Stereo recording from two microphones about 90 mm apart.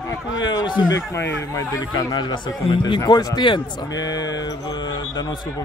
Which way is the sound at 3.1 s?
50° left (ahead or behind).